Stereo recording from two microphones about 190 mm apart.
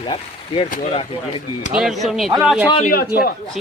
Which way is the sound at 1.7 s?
Centre (ahead or behind).